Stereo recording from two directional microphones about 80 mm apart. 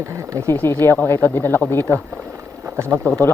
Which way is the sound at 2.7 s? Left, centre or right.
Right.